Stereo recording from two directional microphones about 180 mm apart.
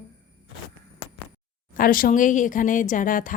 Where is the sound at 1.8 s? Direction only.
50° left (ahead or behind).